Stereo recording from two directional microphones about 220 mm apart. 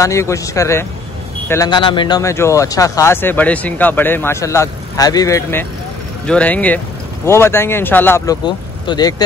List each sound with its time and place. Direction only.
0.0 s speech: 15° left (ahead or behind)
8.5 s speech: 20° left (ahead or behind)